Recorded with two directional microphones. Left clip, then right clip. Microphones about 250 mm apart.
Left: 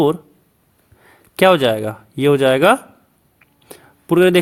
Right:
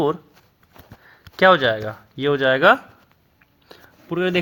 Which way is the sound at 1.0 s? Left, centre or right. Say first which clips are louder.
Left 2 dB; left.